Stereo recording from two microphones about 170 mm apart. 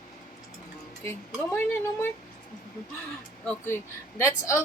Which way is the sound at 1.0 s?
15° left (ahead or behind).